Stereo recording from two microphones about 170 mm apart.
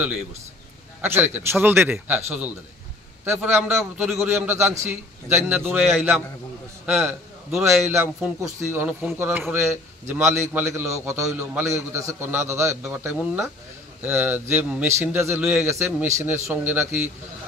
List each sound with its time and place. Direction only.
1.0 s a man's voice: 10° right (ahead or behind)
5.8 s a man's voice: centre (ahead or behind)
7.1 s a man's voice: 15° right (ahead or behind)